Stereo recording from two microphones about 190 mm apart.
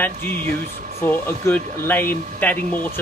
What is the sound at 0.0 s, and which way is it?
A man's voice, 10° left (ahead or behind).